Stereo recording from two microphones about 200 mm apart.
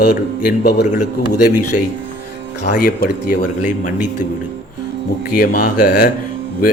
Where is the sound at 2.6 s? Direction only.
45° left (ahead or behind).